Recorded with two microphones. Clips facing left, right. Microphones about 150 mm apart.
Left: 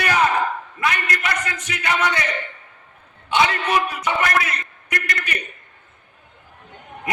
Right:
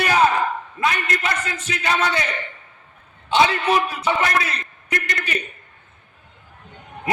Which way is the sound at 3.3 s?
25° right (ahead or behind).